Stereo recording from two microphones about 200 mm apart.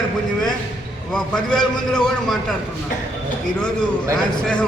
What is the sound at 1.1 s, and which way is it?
A man's voice, 5° left (ahead or behind).